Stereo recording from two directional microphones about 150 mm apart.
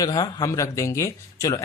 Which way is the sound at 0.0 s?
25° left (ahead or behind).